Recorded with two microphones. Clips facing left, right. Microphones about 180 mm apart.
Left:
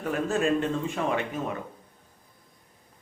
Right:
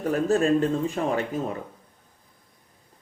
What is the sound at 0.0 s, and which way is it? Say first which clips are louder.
Speech: right 4 dB; 40° right (ahead or behind).